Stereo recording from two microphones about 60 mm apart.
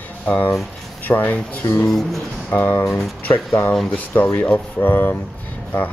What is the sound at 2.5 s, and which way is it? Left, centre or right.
Speech, left.